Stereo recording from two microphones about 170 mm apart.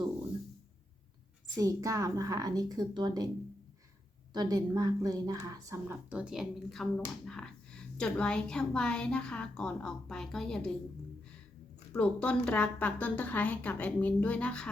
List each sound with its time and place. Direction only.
1.5 s a woman's voice: 20° right (ahead or behind)
4.4 s a woman's voice: 25° right (ahead or behind)
6.1 s a woman's voice: 5° right (ahead or behind)
11.9 s a woman's voice: 10° left (ahead or behind)